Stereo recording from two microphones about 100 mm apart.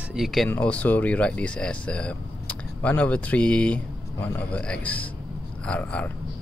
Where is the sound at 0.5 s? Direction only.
15° left (ahead or behind).